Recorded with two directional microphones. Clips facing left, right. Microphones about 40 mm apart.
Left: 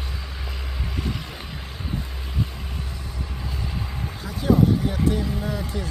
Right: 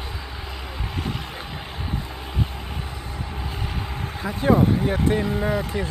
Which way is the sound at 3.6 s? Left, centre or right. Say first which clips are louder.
Even; right.